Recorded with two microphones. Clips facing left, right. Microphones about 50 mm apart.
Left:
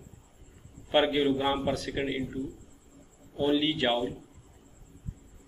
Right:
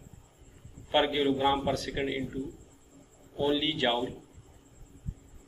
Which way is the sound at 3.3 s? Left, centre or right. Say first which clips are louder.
Left 2 dB; left.